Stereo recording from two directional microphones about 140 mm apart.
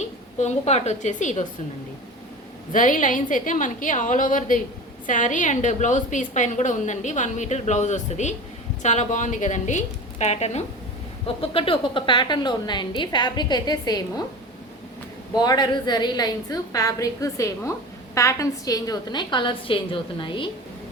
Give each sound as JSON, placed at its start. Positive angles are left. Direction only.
{"t": 0.0, "sound": "a woman's voice", "side_deg": 55}
{"t": 2.7, "sound": "a woman's voice", "side_deg": 70}
{"t": 11.3, "sound": "a woman's voice", "side_deg": 40}
{"t": 15.4, "sound": "a woman's voice", "side_deg": 30}